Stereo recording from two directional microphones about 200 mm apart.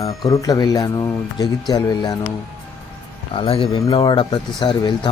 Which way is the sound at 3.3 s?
25° left (ahead or behind).